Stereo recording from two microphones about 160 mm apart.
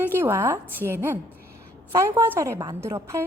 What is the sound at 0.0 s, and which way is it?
A woman's voice, 15° right (ahead or behind).